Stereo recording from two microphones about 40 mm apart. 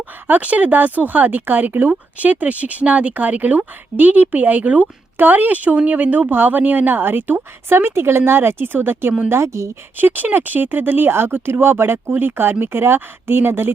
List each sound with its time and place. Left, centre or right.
0.3 s speech: right
2.1 s speech: right
5.1 s speech: right
7.7 s speech: right
10.0 s speech: right
12.1 s speech: right